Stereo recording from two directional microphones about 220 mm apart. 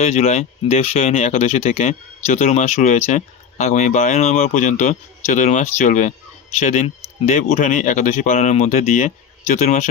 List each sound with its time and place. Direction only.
0.0 s speech: 30° left (ahead or behind)